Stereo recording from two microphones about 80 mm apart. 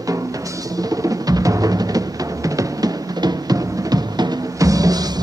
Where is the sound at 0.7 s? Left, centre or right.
Right.